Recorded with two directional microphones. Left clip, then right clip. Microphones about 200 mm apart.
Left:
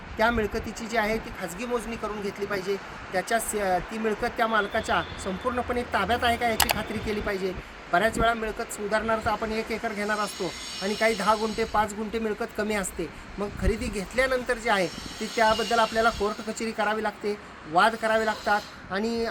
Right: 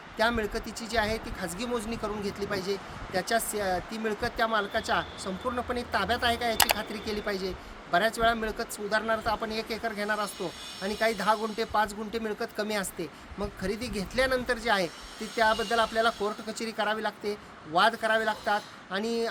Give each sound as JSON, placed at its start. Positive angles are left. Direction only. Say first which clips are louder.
{"t": 0.2, "sound": "speech", "louder": "left 3 dB", "side_deg": -5}
{"t": 10.4, "sound": "speech", "louder": "left 4 dB", "side_deg": -55}
{"t": 11.2, "sound": "speech", "louder": "left 3 dB", "side_deg": -5}
{"t": 16.2, "sound": "speech", "louder": "left 3 dB", "side_deg": 0}